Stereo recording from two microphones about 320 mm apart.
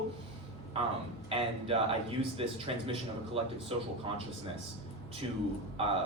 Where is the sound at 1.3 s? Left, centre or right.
Centre.